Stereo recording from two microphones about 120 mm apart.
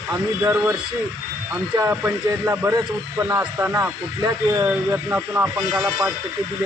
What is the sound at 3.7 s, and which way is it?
Speech, 25° right (ahead or behind).